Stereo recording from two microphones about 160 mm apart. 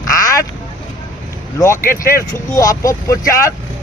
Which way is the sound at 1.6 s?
15° left (ahead or behind).